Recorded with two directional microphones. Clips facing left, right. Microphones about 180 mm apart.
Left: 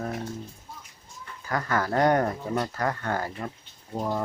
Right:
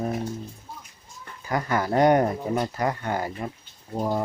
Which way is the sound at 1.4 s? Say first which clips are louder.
Right 2 dB; 15° right (ahead or behind).